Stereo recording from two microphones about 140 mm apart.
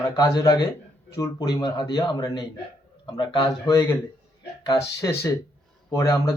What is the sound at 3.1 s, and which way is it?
Speech, 30° left (ahead or behind).